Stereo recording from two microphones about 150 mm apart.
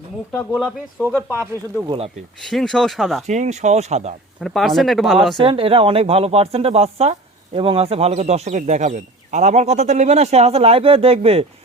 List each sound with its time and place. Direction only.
0.5 s speech: 5° left (ahead or behind)
1.0 s speech: 15° right (ahead or behind)
2.4 s speech: 5° left (ahead or behind)
3.2 s speech: 50° right (ahead or behind)
4.4 s speech: centre (ahead or behind)
5.4 s speech: 40° right (ahead or behind)